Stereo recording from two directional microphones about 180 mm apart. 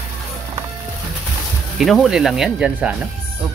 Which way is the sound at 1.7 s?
Centre (ahead or behind).